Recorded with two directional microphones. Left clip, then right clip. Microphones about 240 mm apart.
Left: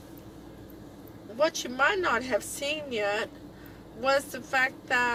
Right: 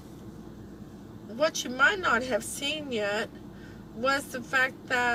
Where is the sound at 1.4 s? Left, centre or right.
Centre.